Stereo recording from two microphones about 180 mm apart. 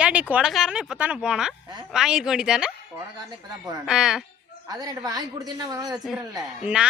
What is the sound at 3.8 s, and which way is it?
Speech, 5° right (ahead or behind).